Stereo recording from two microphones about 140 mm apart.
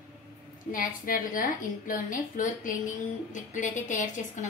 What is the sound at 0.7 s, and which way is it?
A woman's voice, 80° left.